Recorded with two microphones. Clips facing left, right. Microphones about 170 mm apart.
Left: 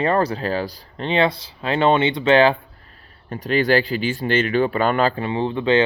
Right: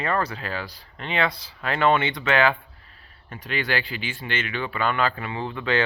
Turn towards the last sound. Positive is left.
turn(degrees=25)  # may be behind; listen again after turning